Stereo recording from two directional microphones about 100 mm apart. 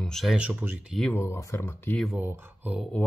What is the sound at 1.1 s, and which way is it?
Speech, 25° left (ahead or behind).